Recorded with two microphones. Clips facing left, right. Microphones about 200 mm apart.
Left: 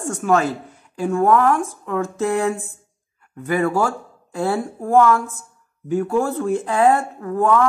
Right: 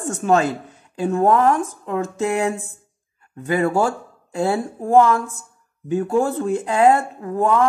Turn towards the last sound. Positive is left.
turn(degrees=-15)  # may be behind; listen again after turning